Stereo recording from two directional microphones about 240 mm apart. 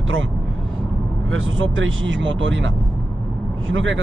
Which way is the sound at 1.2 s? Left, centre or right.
Right.